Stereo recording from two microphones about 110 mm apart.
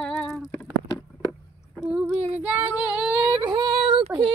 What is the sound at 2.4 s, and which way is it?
Female singing, 15° right (ahead or behind).